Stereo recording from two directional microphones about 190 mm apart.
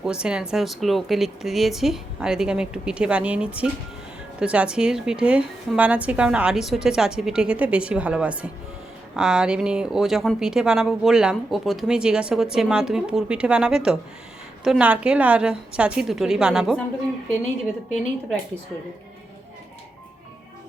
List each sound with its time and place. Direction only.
0.0 s speech: 5° right (ahead or behind)